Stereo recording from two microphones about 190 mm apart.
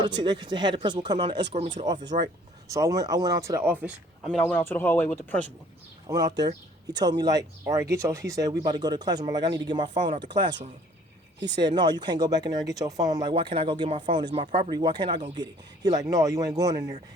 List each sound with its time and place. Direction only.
0.0 s speech: 25° right (ahead or behind); by 5.4 s 10° left (ahead or behind)
6.1 s speech: 20° right (ahead or behind)
11.5 s speech: 25° right (ahead or behind)